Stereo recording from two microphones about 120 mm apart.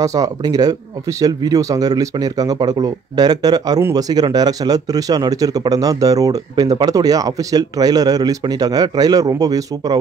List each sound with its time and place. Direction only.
0.0 s speech: 30° right (ahead or behind)